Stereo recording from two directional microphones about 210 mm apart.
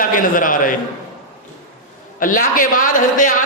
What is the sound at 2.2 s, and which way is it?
A man's voice, 40° left (ahead or behind).